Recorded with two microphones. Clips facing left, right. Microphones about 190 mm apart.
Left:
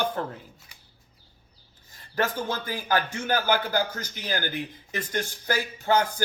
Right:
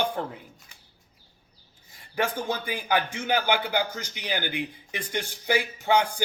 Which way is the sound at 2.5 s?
15° right (ahead or behind).